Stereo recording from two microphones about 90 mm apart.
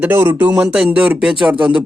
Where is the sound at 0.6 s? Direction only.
10° right (ahead or behind).